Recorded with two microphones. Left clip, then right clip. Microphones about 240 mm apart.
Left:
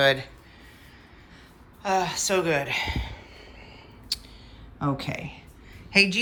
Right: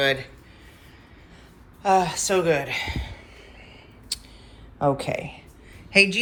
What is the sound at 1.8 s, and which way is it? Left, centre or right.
Speech, centre.